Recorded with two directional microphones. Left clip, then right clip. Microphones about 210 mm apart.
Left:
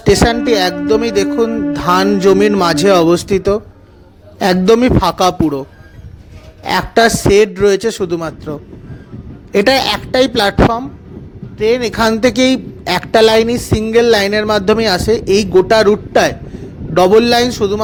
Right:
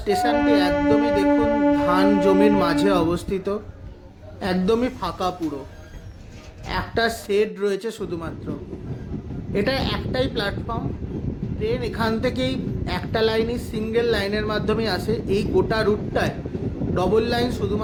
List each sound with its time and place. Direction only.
0.0 s music: 45° left (ahead or behind)
0.4 s a man's voice: 45° left (ahead or behind)
6.7 s a man's voice: 45° left (ahead or behind)